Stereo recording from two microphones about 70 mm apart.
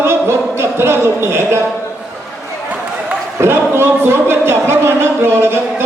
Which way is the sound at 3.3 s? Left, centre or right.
Right.